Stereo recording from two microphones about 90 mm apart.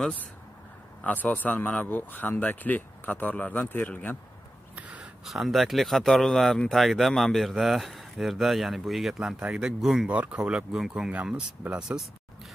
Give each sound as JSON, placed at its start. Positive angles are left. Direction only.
{"t": 1.0, "sound": "a man's voice", "side_deg": 15}
{"t": 4.7, "sound": "a sound", "side_deg": -15}
{"t": 5.2, "sound": "speech", "side_deg": 0}
{"t": 10.0, "sound": "speech", "side_deg": -15}